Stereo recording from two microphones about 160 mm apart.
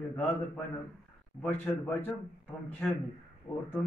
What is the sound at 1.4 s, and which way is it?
A man's voice, 10° left (ahead or behind).